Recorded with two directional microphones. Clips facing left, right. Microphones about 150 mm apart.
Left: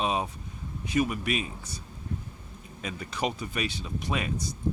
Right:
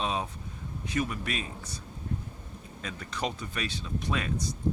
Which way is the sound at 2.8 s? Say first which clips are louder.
Left 3 dB; 10° left (ahead or behind).